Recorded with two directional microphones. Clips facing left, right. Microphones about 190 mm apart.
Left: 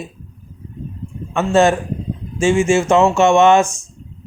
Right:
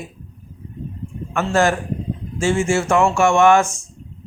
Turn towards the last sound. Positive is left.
turn(degrees=20)  # may be behind; listen again after turning